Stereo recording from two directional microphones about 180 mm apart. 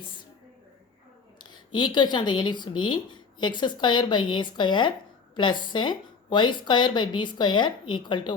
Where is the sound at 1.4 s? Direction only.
25° left (ahead or behind).